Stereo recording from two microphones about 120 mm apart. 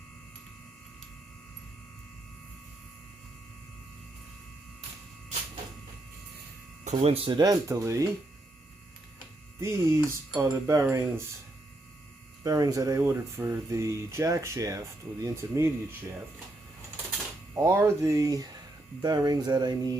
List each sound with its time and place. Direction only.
6.8 s speech: 65° right (ahead or behind)
7.3 s speech: 35° right (ahead or behind)
9.6 s speech: 25° right (ahead or behind)
12.4 s speech: 30° right (ahead or behind)
17.5 s speech: 25° right (ahead or behind)
19.0 s a sound: 35° right (ahead or behind)